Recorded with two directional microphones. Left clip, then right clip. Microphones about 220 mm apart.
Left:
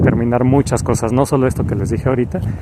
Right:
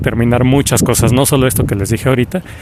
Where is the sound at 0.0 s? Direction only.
35° right (ahead or behind).